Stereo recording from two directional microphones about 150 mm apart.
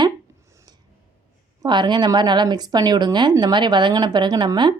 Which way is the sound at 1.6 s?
30° right (ahead or behind).